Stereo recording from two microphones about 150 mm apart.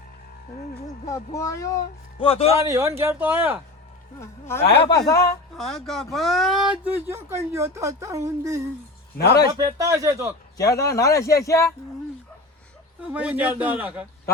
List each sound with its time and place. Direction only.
1.0 s speech: 20° left (ahead or behind)
2.2 s a man's voice: 40° left (ahead or behind)
2.5 s speech: 20° right (ahead or behind)
4.2 s speech: 15° left (ahead or behind)
5.5 s speech: centre (ahead or behind); by 8.6 s 20° right (ahead or behind)
9.1 s a man's voice: 90° left
9.5 s speech: 25° right (ahead or behind)
10.6 s speech: 20° left (ahead or behind)
13.0 s speech: 10° right (ahead or behind)